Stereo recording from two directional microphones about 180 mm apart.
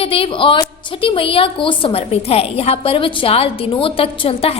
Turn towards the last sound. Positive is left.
turn(degrees=30)  # may be behind; listen again after turning